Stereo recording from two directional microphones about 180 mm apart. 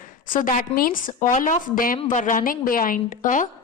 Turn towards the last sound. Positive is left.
turn(degrees=45)  # may be behind; listen again after turning